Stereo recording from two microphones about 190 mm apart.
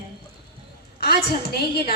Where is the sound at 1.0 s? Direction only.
55° left (ahead or behind).